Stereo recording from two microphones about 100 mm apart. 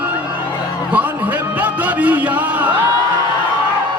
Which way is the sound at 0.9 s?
15° right (ahead or behind).